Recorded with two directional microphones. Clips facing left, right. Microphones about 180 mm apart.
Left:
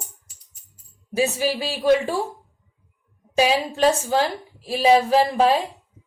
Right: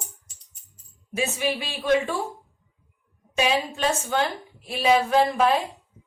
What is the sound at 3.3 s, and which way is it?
A woman's voice, 35° left (ahead or behind).